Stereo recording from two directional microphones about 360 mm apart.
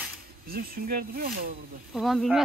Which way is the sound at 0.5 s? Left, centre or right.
Right.